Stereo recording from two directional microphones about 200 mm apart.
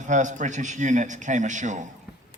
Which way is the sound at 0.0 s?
40° right (ahead or behind).